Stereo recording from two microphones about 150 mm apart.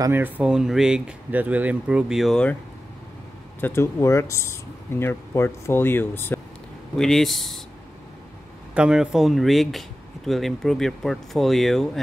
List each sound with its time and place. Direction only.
0.0 s speech: 15° right (ahead or behind); by 2.5 s 5° left (ahead or behind)
3.6 s speech: 15° left (ahead or behind)
7.0 s speech: 5° left (ahead or behind)
8.7 s speech: 5° right (ahead or behind)